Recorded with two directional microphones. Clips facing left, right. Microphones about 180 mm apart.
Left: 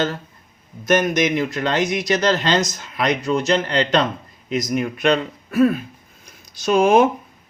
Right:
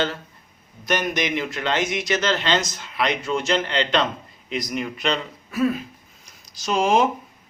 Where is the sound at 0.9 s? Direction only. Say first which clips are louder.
Left 6 dB; 45° left (ahead or behind).